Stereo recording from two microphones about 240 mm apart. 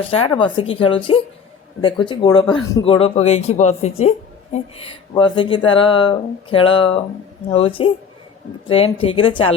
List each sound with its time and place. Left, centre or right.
0.1 s speech: left